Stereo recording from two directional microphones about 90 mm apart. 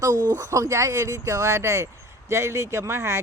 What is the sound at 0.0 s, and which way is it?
Speech, 40° right (ahead or behind).